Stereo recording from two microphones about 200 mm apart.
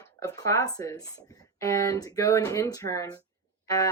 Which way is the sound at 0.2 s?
15° left (ahead or behind).